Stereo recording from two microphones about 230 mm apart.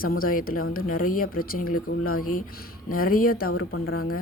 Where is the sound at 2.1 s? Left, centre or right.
Left.